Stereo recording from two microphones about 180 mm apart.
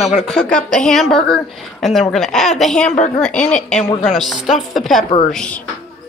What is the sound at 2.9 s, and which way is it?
Speech, 40° left (ahead or behind).